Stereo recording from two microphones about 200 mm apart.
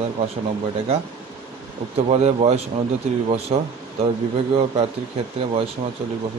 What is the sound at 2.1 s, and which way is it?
A man's voice, 35° right (ahead or behind).